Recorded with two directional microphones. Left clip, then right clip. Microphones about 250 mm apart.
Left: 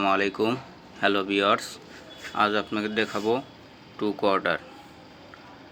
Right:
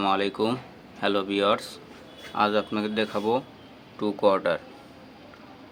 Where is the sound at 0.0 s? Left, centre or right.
Centre.